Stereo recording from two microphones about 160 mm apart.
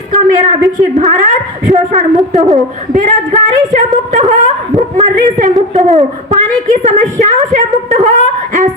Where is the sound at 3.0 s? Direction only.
50° right (ahead or behind).